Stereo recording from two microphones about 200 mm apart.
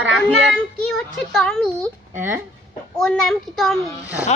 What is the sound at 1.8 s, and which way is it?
Speech, 10° right (ahead or behind).